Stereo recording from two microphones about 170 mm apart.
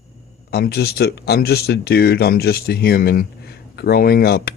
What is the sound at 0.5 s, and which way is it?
Speech, 70° left (ahead or behind).